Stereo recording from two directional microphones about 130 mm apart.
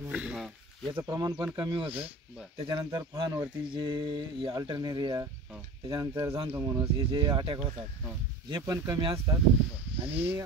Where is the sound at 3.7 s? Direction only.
35° right (ahead or behind); by 6.8 s 20° right (ahead or behind).